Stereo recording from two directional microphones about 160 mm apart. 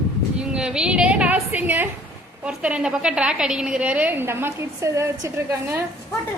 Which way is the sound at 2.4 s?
5° right (ahead or behind).